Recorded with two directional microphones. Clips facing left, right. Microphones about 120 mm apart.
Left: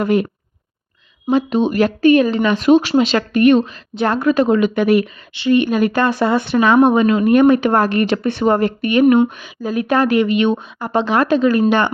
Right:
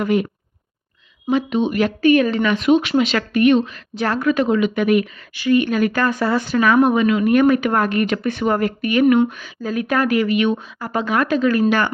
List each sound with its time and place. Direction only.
0.0 s speech: 35° left (ahead or behind)
1.3 s a woman's voice: 35° left (ahead or behind)